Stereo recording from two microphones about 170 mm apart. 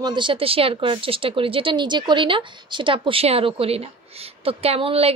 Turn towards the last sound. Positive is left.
turn(degrees=-35)  # may be behind; listen again after turning